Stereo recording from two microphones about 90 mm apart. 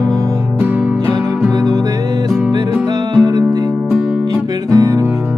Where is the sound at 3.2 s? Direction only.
45° right (ahead or behind).